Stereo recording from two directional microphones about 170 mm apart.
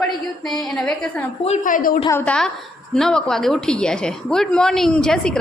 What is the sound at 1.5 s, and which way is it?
Speech, 50° left (ahead or behind).